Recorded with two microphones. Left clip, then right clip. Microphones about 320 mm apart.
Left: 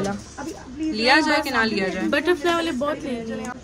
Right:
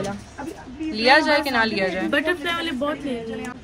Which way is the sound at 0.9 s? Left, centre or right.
Centre.